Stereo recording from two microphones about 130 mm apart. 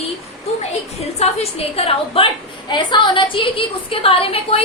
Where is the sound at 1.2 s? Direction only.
50° left (ahead or behind).